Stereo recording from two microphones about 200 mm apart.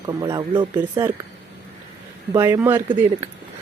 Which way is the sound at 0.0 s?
20° right (ahead or behind).